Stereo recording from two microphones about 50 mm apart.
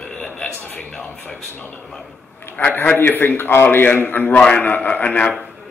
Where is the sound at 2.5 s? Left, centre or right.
Left.